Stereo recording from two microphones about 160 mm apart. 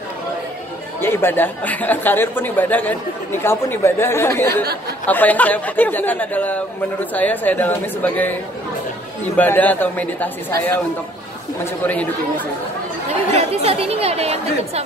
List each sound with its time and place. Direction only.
1.0 s speech: 15° left (ahead or behind)
9.4 s speech: 10° left (ahead or behind)
11.6 s speech: 10° left (ahead or behind)
13.4 s speech: 40° right (ahead or behind)